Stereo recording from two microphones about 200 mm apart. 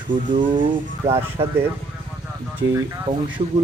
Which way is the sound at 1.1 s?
15° right (ahead or behind).